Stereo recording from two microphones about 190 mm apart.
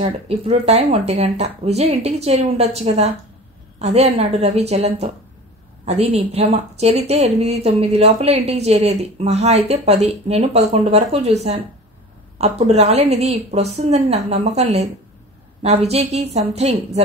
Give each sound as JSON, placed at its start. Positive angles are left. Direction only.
{"t": 0.0, "sound": "a woman's voice", "side_deg": -35}